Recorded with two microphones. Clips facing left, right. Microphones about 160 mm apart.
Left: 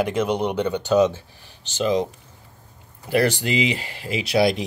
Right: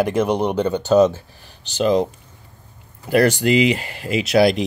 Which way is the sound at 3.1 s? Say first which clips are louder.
Right 5 dB; 50° right (ahead or behind).